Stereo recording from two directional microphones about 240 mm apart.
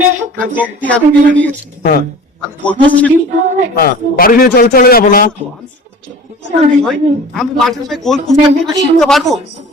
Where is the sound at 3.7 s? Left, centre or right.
Left.